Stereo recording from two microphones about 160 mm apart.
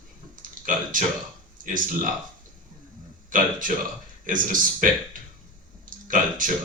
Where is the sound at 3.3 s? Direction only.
55° right (ahead or behind).